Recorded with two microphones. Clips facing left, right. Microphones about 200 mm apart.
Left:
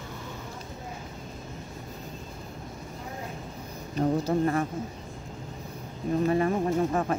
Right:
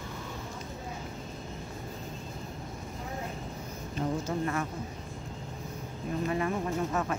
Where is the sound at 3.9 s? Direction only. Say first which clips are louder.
Left 7 dB; 35° left (ahead or behind).